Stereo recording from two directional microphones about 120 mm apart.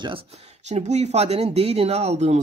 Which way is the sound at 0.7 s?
70° right (ahead or behind).